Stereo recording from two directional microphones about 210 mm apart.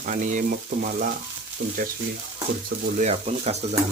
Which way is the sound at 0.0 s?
40° right (ahead or behind).